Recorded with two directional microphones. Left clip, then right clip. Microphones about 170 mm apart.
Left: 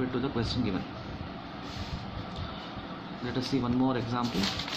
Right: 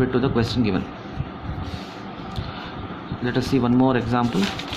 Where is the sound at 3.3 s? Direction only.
50° right (ahead or behind).